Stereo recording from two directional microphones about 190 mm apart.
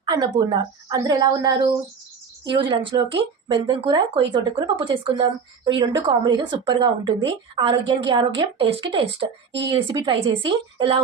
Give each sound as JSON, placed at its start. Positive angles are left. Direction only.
{"t": 0.0, "sound": "speech", "side_deg": -20}